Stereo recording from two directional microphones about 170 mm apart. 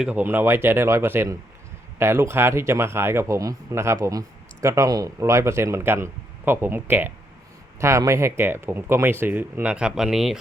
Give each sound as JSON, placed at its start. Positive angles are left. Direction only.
{"t": 0.0, "sound": "speech", "side_deg": -10}